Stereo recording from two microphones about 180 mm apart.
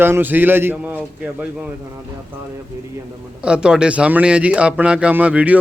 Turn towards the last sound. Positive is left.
turn(degrees=-10)  # may be behind; listen again after turning